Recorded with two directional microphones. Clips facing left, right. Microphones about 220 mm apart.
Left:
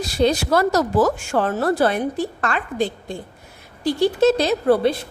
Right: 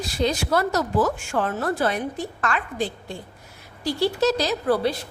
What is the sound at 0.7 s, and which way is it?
Speech, 90° left.